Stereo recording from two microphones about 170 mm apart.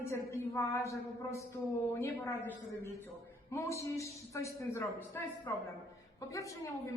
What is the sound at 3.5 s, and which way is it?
A woman's voice, 15° left (ahead or behind).